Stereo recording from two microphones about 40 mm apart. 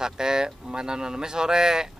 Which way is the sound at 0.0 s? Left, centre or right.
Centre.